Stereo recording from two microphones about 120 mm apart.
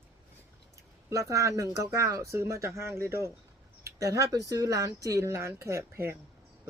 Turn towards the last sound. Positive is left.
turn(degrees=-20)  # may be behind; listen again after turning